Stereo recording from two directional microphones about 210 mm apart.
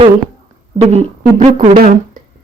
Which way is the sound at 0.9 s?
30° right (ahead or behind).